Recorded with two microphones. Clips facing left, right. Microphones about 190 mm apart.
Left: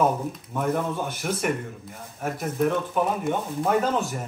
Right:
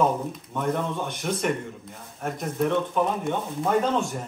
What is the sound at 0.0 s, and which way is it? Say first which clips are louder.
Speech: even; 5° left (ahead or behind).